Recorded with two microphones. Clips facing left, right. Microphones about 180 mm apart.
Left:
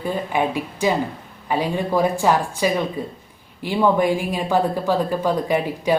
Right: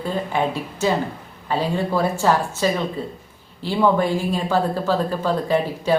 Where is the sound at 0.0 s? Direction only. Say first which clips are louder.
Even; 15° left (ahead or behind).